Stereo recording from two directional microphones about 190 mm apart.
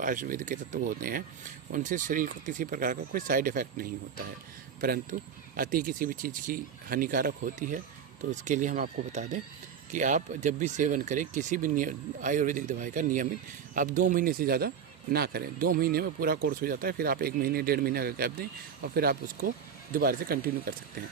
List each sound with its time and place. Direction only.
0.0 s speech: 45° right (ahead or behind)
5.1 s speech: 50° right (ahead or behind)